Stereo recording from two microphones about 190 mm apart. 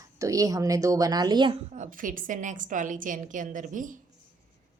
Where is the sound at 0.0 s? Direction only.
15° right (ahead or behind).